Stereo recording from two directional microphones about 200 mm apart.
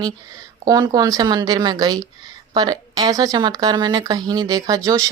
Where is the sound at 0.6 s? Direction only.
20° right (ahead or behind).